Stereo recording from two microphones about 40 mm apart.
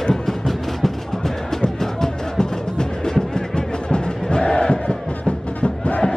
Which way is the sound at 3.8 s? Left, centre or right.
Left.